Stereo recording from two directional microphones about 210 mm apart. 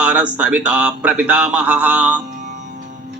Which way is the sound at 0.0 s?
5° right (ahead or behind).